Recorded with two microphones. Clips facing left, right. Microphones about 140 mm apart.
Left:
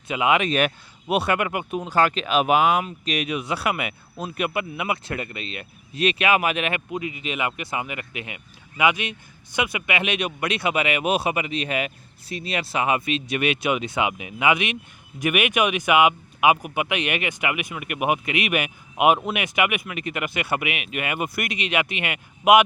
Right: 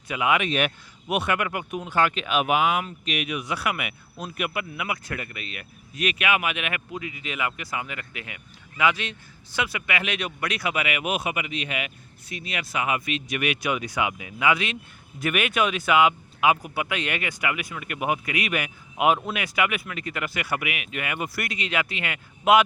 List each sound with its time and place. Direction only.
0.1 s speech: 25° left (ahead or behind)
0.4 s speech: 40° left (ahead or behind)
1.0 s speech: 30° left (ahead or behind)
6.9 s speech: 20° left (ahead or behind)